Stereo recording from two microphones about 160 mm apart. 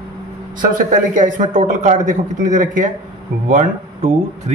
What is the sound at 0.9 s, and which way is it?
A man's voice, 50° right (ahead or behind).